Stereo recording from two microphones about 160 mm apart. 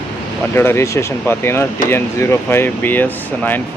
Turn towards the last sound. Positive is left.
turn(degrees=10)  # may be behind; listen again after turning